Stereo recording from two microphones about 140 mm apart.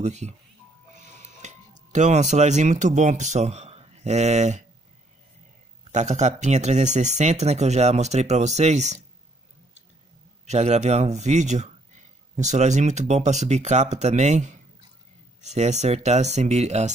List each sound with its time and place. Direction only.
0.0 s speech: 55° right (ahead or behind)
5.9 s speech: 55° right (ahead or behind)
10.4 s speech: 55° right (ahead or behind)